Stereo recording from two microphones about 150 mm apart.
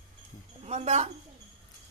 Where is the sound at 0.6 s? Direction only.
45° right (ahead or behind).